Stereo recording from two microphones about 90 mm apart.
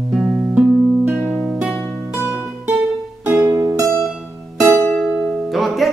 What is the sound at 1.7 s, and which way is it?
Music, 25° left (ahead or behind).